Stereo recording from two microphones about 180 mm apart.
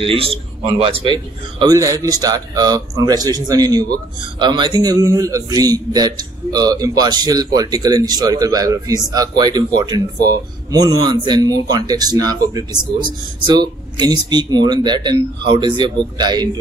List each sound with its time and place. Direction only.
0.0 s a man's voice: 30° right (ahead or behind)